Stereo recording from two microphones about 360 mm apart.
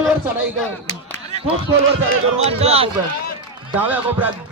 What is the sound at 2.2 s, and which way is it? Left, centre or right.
Speech, centre.